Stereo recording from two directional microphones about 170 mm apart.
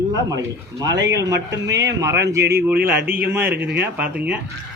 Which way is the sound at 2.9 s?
10° right (ahead or behind).